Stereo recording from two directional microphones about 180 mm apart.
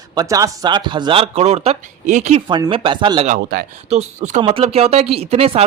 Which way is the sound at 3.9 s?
40° right (ahead or behind).